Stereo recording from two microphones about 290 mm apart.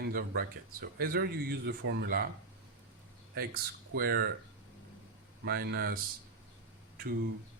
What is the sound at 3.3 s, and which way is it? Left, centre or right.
Speech, right.